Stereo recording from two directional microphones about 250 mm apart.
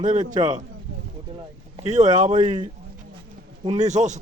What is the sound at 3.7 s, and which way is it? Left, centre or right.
Speech, right.